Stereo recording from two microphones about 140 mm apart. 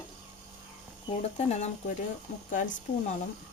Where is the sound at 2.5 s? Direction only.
65° left (ahead or behind).